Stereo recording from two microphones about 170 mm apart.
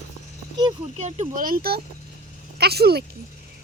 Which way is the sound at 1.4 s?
60° right (ahead or behind).